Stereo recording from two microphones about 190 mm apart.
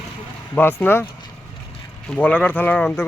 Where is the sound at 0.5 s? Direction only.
10° left (ahead or behind).